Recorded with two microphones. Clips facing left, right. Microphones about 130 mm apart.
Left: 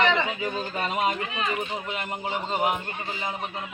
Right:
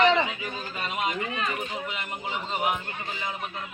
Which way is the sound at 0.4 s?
40° left (ahead or behind).